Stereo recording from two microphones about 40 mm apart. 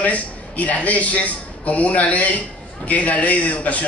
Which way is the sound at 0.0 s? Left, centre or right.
Left.